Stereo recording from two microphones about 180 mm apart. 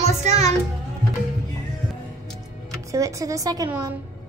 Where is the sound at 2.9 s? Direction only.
20° right (ahead or behind).